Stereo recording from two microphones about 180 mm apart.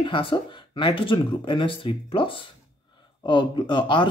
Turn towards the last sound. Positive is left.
turn(degrees=25)  # may be behind; listen again after turning